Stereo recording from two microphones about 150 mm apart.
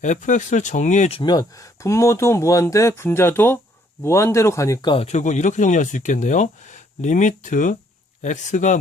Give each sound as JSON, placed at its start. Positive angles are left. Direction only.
{"t": 0.0, "sound": "speech", "side_deg": 55}
{"t": 1.2, "sound": "speech", "side_deg": 30}
{"t": 4.9, "sound": "speech", "side_deg": 50}